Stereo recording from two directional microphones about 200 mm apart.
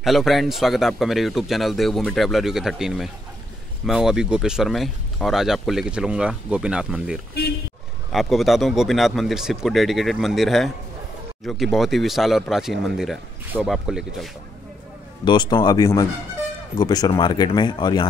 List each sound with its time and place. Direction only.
0.0 s speech: centre (ahead or behind)
15.2 s speech: 20° left (ahead or behind)